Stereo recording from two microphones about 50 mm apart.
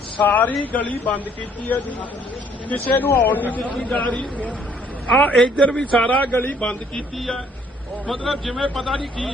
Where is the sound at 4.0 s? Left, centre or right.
Left.